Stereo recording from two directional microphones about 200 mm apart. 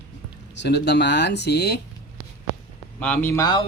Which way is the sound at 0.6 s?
60° left (ahead or behind).